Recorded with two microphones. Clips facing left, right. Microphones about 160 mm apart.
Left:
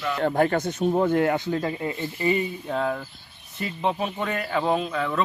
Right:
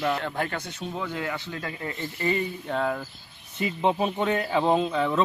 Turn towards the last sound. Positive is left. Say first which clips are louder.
# right 2 dB
turn(degrees=-20)  # may be behind; listen again after turning